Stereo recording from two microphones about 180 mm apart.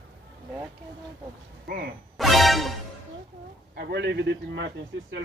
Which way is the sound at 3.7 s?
65° right (ahead or behind).